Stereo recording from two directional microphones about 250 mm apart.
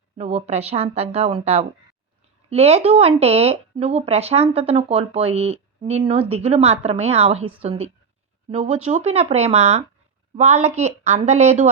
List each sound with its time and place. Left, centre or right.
0.2 s speech: right